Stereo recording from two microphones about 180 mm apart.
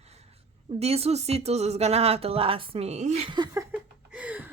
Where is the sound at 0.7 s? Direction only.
35° right (ahead or behind).